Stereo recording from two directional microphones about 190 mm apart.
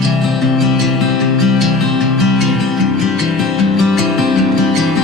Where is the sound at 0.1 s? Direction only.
Centre (ahead or behind).